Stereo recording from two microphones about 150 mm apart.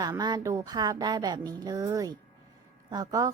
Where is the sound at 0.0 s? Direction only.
25° right (ahead or behind).